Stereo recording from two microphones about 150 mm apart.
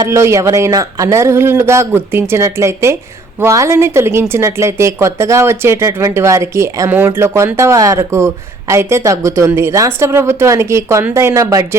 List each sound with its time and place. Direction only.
0.0 s a woman's voice: 20° right (ahead or behind)